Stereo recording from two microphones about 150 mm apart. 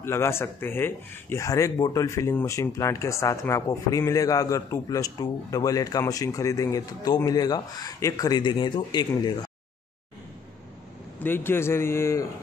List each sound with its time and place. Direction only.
0.0 s speech: 15° left (ahead or behind)
11.1 s a man's voice: 15° left (ahead or behind)